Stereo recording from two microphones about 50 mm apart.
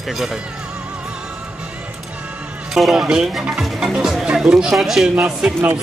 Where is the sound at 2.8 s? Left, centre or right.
Centre.